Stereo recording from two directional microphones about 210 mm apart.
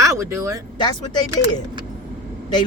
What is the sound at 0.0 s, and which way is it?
Speech, 15° right (ahead or behind).